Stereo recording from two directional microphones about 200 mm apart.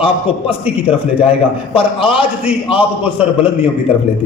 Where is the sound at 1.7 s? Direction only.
25° left (ahead or behind).